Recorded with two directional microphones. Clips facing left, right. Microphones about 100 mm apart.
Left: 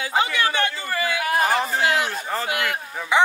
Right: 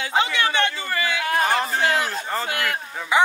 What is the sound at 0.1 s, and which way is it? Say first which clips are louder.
Music: even; 25° right (ahead or behind).